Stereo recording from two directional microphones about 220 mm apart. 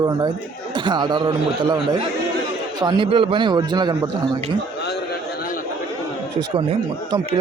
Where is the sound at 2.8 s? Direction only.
20° right (ahead or behind).